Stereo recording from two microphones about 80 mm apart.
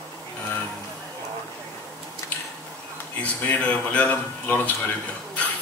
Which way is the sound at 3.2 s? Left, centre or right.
Centre.